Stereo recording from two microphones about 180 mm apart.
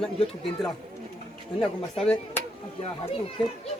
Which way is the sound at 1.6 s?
5° left (ahead or behind).